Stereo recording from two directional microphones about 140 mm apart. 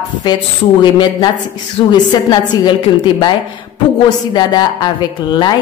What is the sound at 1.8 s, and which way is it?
Speech, 40° left (ahead or behind).